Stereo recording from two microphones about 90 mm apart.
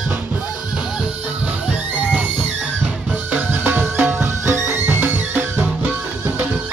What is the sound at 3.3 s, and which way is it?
Music, 25° right (ahead or behind).